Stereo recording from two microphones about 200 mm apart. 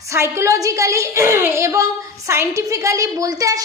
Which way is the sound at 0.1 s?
15° right (ahead or behind).